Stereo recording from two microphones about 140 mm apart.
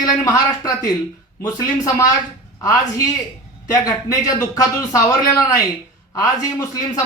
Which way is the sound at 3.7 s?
25° left (ahead or behind).